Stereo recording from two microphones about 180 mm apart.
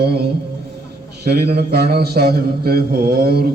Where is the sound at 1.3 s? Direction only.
65° right (ahead or behind).